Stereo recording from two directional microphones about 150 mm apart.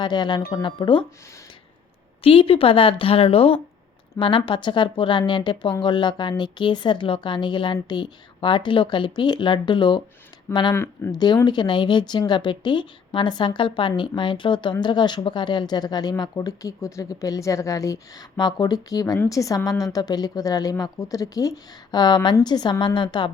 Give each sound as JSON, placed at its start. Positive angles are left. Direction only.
{"t": 0.0, "sound": "speech", "side_deg": 30}
{"t": 2.2, "sound": "speech", "side_deg": 40}
{"t": 10.8, "sound": "speech", "side_deg": 15}
{"t": 11.4, "sound": "speech", "side_deg": 30}